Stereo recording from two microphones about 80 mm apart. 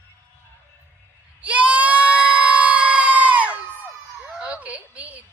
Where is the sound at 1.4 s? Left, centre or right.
Centre.